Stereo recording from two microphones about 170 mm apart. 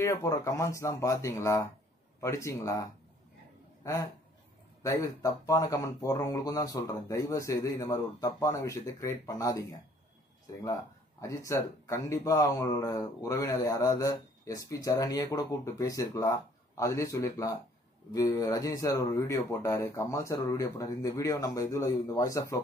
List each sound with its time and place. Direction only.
0.0 s speech: 20° left (ahead or behind)
3.8 s speech: 20° left (ahead or behind)